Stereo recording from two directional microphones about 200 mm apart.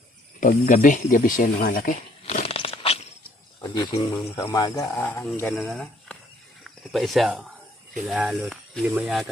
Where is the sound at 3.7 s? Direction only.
20° left (ahead or behind).